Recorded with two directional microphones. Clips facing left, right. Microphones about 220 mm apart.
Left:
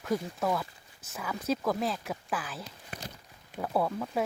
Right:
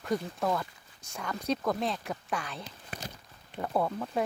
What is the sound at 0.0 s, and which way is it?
Speech, centre (ahead or behind).